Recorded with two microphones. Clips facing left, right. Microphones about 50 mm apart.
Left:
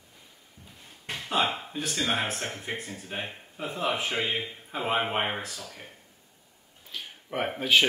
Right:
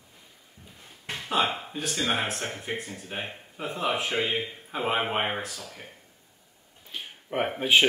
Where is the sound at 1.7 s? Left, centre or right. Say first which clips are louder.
Right 1 dB; centre.